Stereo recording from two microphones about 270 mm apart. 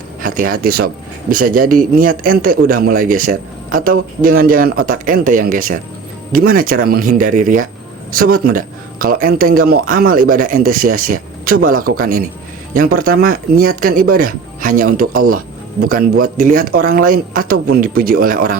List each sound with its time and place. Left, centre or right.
0.2 s a man's voice: right